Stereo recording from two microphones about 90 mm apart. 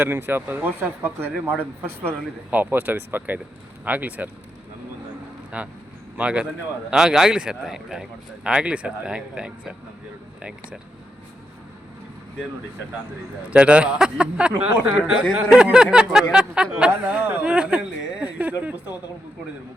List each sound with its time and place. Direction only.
0.0 s speech: 25° right (ahead or behind)
5.5 s speech: 15° right (ahead or behind)
13.5 s speech: 10° right (ahead or behind)